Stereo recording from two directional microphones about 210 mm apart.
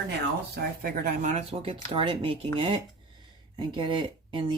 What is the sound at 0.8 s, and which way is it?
Speech, 40° right (ahead or behind).